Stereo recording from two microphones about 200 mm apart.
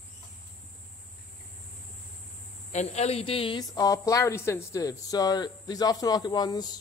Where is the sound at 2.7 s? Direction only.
35° left (ahead or behind).